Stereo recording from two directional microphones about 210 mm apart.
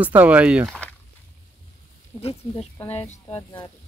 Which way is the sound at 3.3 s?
25° left (ahead or behind).